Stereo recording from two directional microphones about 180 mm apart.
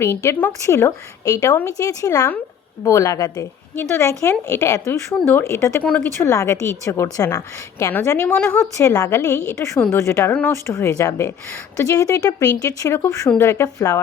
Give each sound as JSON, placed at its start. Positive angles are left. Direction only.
{"t": 0.0, "sound": "speech", "side_deg": 15}